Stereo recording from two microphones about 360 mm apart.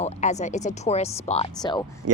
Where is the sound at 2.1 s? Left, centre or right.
Right.